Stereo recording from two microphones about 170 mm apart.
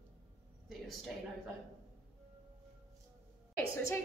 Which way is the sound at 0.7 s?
Centre (ahead or behind).